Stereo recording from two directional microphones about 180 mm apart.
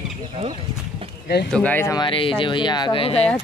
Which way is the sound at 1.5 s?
10° left (ahead or behind).